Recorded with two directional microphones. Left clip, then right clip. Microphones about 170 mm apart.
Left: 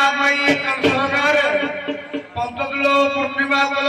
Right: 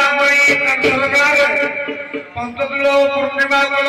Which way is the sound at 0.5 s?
30° left (ahead or behind).